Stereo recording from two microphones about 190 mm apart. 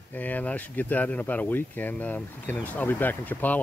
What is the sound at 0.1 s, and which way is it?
Speech, 10° left (ahead or behind).